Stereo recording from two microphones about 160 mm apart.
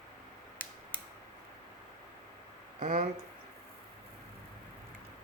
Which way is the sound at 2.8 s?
50° right (ahead or behind).